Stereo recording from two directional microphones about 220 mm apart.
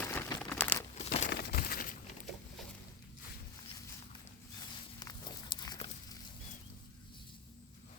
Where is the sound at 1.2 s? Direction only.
45° left (ahead or behind).